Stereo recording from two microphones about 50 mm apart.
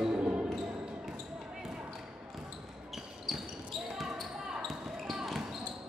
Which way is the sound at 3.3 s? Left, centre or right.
Centre.